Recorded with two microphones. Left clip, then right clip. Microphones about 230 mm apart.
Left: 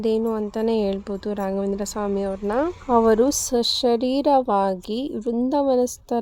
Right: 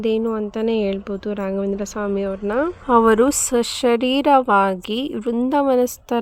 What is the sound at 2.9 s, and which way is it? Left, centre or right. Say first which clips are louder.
Speech: right 3 dB; right.